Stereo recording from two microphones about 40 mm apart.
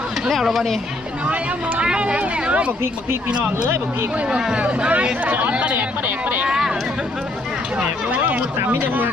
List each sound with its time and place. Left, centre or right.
0.3 s speech: centre
1.2 s speech: right
4.5 s speech: right
5.3 s speech: right
6.5 s speech: centre
8.1 s speech: right